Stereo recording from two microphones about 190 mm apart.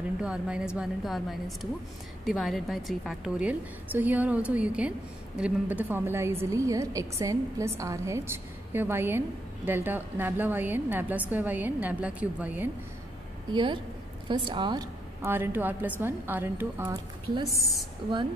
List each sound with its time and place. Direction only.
0.2 s a woman's voice: 5° right (ahead or behind)
13.5 s a woman's voice: 25° right (ahead or behind)
15.2 s a woman's voice: 10° right (ahead or behind)
17.5 s speech: centre (ahead or behind)